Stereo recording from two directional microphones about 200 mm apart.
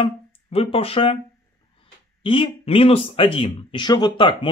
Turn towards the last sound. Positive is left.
turn(degrees=25)  # may be behind; listen again after turning